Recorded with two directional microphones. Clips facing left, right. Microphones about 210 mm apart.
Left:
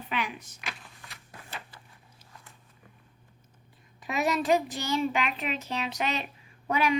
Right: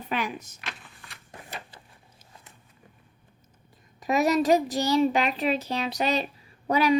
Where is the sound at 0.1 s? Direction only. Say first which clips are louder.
Right 3 dB; 40° right (ahead or behind).